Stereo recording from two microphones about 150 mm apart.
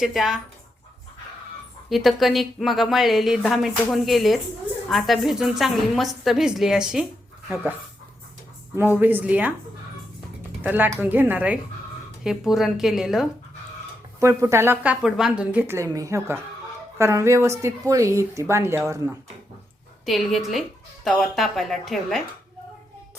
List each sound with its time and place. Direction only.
0.0 s a woman's voice: centre (ahead or behind)
1.9 s a woman's voice: centre (ahead or behind)
10.6 s a woman's voice: 10° right (ahead or behind)
14.2 s a woman's voice: 20° right (ahead or behind)
15.0 s a woman's voice: 5° right (ahead or behind); by 19.1 s 20° right (ahead or behind)
20.1 s a woman's voice: centre (ahead or behind)